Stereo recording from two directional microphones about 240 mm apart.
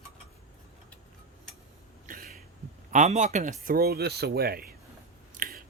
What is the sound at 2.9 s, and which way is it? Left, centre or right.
A man's voice, right.